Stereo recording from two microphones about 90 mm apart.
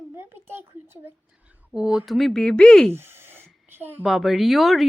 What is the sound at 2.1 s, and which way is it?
Speech, 5° left (ahead or behind).